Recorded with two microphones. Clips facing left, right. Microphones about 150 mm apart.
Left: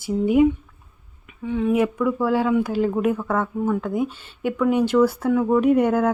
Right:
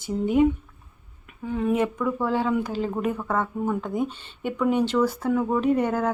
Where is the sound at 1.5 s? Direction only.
Centre (ahead or behind).